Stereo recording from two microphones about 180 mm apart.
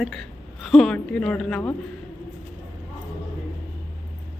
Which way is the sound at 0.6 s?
Centre (ahead or behind).